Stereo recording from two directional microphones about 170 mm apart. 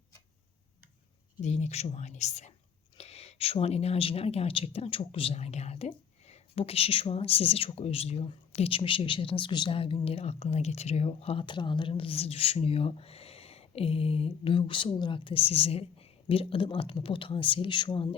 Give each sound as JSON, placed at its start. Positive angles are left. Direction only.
{"t": 1.4, "sound": "speech", "side_deg": 40}